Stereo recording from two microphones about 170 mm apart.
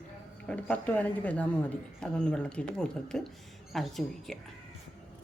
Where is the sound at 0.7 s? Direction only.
10° left (ahead or behind).